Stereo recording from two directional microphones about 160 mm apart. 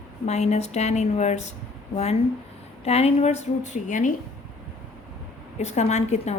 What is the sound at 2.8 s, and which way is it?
A woman's voice, 40° left (ahead or behind).